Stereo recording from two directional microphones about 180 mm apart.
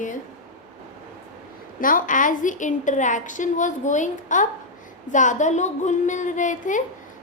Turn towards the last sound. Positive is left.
turn(degrees=45)  # may be behind; listen again after turning